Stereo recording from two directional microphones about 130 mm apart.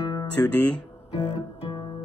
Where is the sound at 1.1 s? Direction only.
35° left (ahead or behind).